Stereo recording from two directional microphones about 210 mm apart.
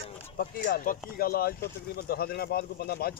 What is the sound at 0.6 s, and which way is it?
Speech, 45° left (ahead or behind).